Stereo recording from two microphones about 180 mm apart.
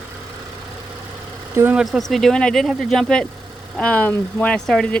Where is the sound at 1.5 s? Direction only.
10° right (ahead or behind).